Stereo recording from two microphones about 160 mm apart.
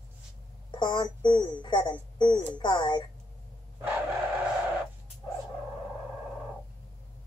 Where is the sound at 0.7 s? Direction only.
30° left (ahead or behind).